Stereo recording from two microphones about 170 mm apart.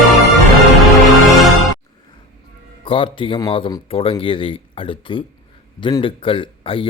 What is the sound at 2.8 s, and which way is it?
Speech, 30° left (ahead or behind).